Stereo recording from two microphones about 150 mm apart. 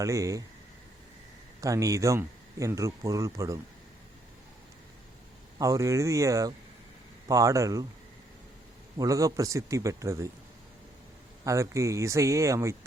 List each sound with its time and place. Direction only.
0.0 s speech: 20° right (ahead or behind)
1.6 s speech: 20° right (ahead or behind)
5.5 s speech: 20° right (ahead or behind)
9.0 s speech: 20° right (ahead or behind)
11.4 s speech: 20° right (ahead or behind)